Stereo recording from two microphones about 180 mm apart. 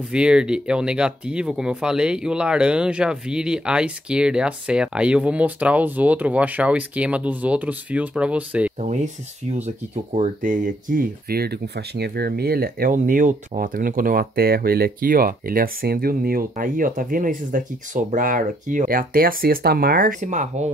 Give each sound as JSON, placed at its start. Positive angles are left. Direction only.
{"t": 0.1, "sound": "speech", "side_deg": -5}
{"t": 8.8, "sound": "speech", "side_deg": -40}